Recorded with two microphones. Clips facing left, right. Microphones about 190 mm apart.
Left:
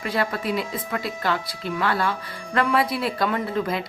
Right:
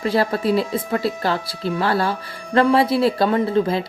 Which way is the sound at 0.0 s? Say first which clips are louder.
Right 6 dB; 30° right (ahead or behind).